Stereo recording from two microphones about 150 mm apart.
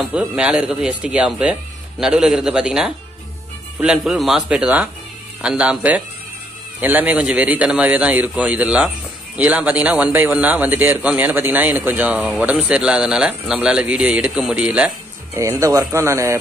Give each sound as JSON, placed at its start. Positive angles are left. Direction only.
{"t": 0.0, "sound": "a man's voice", "side_deg": -5}
{"t": 15.6, "sound": "speech", "side_deg": -20}